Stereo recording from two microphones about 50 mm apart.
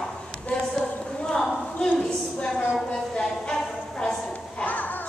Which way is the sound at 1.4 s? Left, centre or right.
Centre.